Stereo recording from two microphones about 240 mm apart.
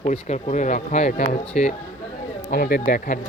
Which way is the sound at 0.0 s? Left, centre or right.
Left.